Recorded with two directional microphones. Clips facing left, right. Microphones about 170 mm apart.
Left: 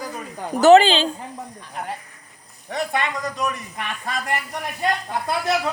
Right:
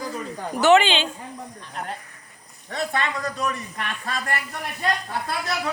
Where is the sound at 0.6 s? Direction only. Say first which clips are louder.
Left 5 dB; 35° left (ahead or behind).